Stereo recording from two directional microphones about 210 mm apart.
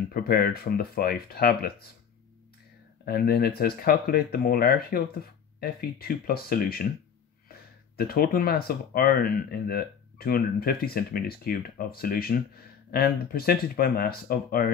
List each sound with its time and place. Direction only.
0.1 s speech: 45° left (ahead or behind)
3.1 s speech: 50° left (ahead or behind)